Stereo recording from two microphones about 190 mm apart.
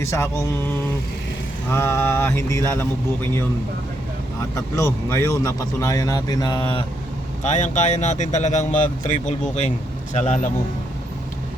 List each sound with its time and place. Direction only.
0.0 s speech: 15° left (ahead or behind)
4.5 s speech: 15° left (ahead or behind)
7.4 s a man's voice: 40° left (ahead or behind)